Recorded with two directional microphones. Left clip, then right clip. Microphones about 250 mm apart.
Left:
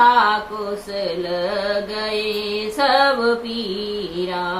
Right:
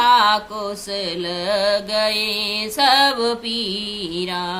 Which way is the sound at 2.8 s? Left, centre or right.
Right.